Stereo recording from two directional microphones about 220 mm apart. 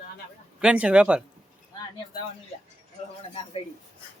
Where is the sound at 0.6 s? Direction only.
5° right (ahead or behind).